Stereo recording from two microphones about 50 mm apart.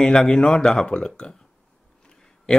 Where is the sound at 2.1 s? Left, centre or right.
Centre.